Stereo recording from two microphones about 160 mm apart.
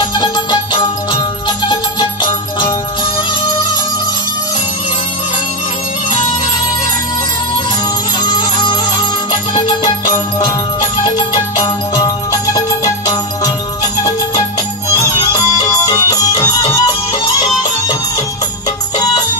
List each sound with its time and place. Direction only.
0.1 s music: 25° left (ahead or behind)
8.2 s music: 25° left (ahead or behind)
11.6 s music: 25° left (ahead or behind)
14.9 s music: 20° left (ahead or behind)